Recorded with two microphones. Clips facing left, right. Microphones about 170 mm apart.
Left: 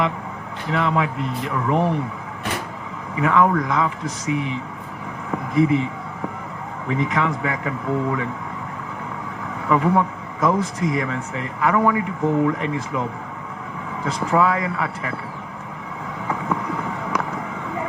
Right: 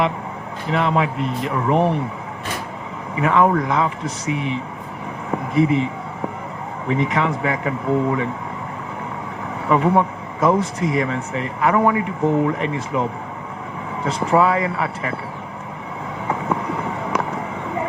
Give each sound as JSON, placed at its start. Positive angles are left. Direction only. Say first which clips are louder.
{"t": 0.7, "sound": "speech", "louder": "right 2 dB", "side_deg": -20}
{"t": 3.2, "sound": "speech", "louder": "right 1 dB", "side_deg": -25}
{"t": 9.6, "sound": "speech", "louder": "right 2 dB", "side_deg": -25}
{"t": 16.2, "sound": "vehicle", "louder": "right 2 dB", "side_deg": -25}